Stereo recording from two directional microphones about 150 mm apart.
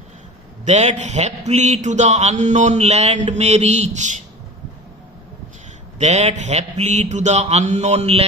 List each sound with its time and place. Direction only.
0.7 s speech: 50° right (ahead or behind)
5.9 s speech: 50° right (ahead or behind)